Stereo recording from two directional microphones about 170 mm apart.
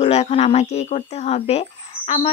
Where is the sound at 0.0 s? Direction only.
40° left (ahead or behind).